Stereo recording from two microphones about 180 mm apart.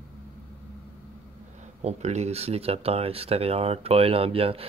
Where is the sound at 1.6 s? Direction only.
40° right (ahead or behind).